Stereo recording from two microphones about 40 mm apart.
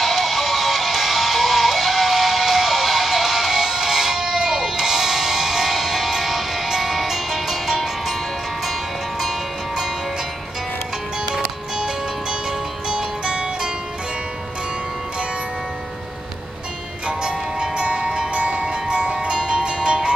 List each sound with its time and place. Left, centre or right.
0.0 s music: centre
11.3 s music: centre
17.2 s music: right